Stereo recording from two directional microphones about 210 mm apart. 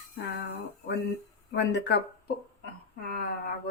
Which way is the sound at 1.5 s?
55° left (ahead or behind).